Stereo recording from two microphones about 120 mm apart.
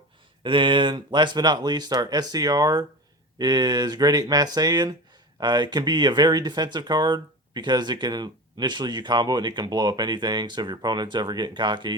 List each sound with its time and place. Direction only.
0.4 s speech: 45° right (ahead or behind)